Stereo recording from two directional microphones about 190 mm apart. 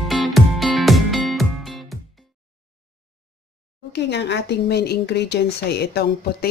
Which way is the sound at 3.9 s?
65° left (ahead or behind).